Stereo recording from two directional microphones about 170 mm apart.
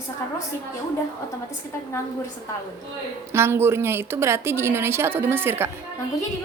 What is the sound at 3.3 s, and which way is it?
A woman's voice, 15° right (ahead or behind).